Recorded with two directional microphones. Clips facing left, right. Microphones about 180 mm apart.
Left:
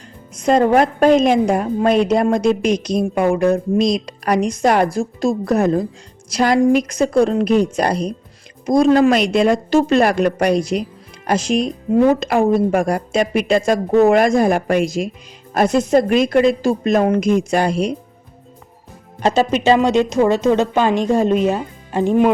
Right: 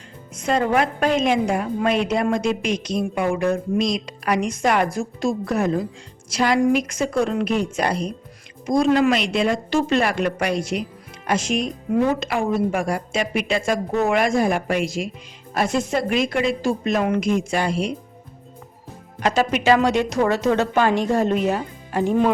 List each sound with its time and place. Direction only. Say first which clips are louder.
0.3 s a woman's voice: left 6 dB; 40° left (ahead or behind)
19.2 s speech: left 4 dB; 25° left (ahead or behind)